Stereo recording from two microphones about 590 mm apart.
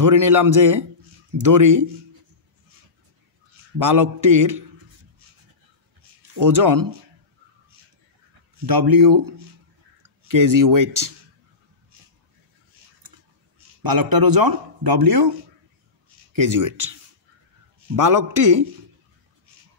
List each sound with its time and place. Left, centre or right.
0.0 s a man's voice: right
3.7 s a man's voice: right
6.4 s speech: right
8.6 s speech: right
13.8 s speech: right
16.5 s a man's voice: right
17.9 s a man's voice: right